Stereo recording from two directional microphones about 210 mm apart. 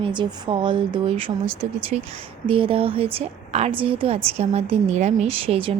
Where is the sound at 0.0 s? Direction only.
20° right (ahead or behind).